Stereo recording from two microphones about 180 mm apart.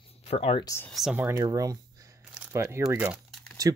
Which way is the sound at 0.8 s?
Centre (ahead or behind).